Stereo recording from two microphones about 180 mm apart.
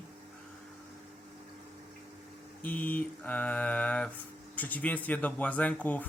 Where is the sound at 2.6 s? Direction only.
10° left (ahead or behind).